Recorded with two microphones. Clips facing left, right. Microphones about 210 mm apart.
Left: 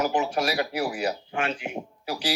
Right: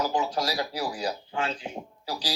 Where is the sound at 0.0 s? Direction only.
65° left (ahead or behind).